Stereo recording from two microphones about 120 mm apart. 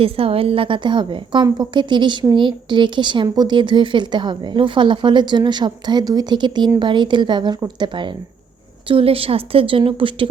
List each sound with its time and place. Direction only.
0.0 s a woman's voice: 55° right (ahead or behind)